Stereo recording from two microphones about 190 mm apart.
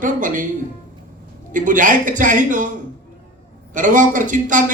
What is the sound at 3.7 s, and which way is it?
Speech, 45° right (ahead or behind).